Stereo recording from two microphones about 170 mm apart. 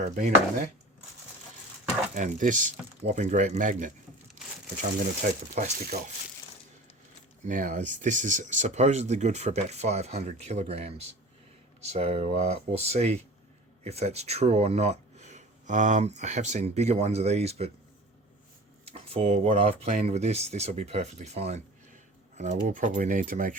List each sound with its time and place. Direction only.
2.1 s speech: 45° right (ahead or behind)
4.4 s crumpling: 50° right (ahead or behind)
4.8 s speech: 50° right (ahead or behind)
7.4 s speech: 50° right (ahead or behind)
18.9 s speech: 35° right (ahead or behind); by 23.6 s 50° right (ahead or behind)